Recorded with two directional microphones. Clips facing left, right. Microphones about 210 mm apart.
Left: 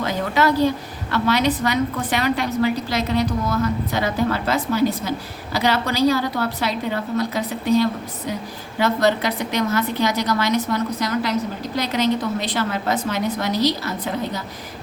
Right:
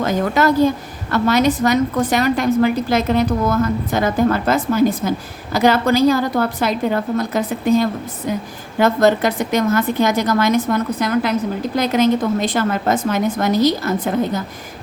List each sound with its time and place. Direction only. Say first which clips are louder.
0.0 s a woman's voice: right 4 dB; 45° right (ahead or behind)